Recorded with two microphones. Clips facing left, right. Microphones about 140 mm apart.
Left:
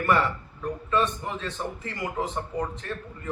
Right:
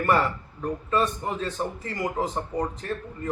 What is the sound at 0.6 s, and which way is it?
A man's voice, 40° right (ahead or behind).